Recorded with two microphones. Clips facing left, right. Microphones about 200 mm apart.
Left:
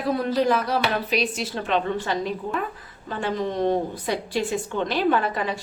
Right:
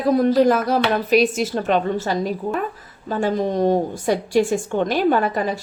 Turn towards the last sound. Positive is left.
turn(degrees=-40)  # may be behind; listen again after turning